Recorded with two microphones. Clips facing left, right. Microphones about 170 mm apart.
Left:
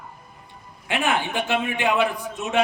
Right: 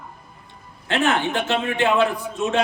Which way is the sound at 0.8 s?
15° left (ahead or behind).